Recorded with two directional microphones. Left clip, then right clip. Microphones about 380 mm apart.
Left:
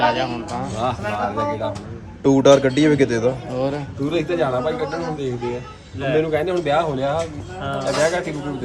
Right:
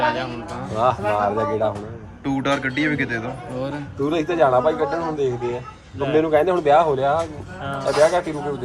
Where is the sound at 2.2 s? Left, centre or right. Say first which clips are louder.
Left 9 dB; centre.